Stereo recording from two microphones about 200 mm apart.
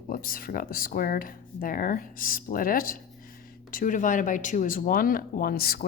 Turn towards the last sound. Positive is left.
turn(degrees=50)  # may be behind; listen again after turning